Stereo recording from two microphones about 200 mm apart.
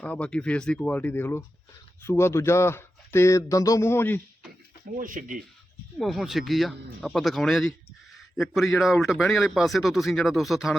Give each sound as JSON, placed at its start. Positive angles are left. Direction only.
{"t": 0.0, "sound": "speech", "side_deg": 5}
{"t": 4.9, "sound": "speech", "side_deg": -40}
{"t": 6.0, "sound": "speech", "side_deg": 0}